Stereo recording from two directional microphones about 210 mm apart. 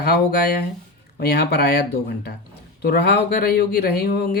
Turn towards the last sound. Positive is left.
turn(degrees=50)  # may be behind; listen again after turning